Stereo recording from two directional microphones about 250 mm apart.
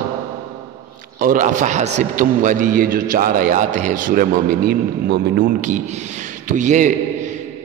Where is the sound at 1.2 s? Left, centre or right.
Right.